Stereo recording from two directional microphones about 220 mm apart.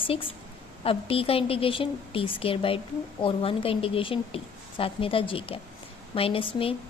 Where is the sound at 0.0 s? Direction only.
25° left (ahead or behind).